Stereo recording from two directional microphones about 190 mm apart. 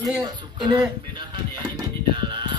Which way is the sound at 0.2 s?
25° right (ahead or behind).